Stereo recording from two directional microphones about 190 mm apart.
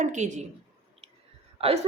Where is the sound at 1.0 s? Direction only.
35° right (ahead or behind).